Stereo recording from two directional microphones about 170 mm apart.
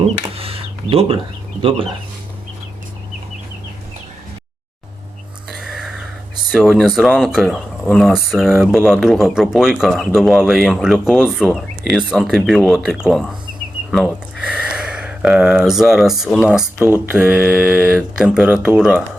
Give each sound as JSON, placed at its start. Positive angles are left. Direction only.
{"t": 0.0, "sound": "cash register", "side_deg": -35}
{"t": 5.5, "sound": "a sound", "side_deg": -5}
{"t": 6.5, "sound": "speech", "side_deg": 0}